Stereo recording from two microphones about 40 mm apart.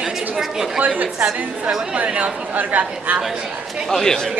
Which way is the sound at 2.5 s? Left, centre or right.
Right.